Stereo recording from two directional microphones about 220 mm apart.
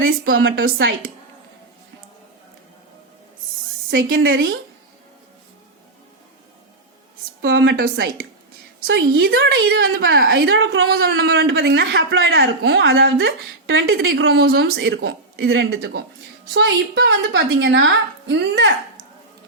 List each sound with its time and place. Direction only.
0.1 s a woman's voice: 45° right (ahead or behind)
3.9 s a woman's voice: 55° right (ahead or behind)
7.4 s a woman's voice: 55° right (ahead or behind)
8.9 s a woman's voice: 55° right (ahead or behind)
9.8 s a woman's voice: 45° right (ahead or behind)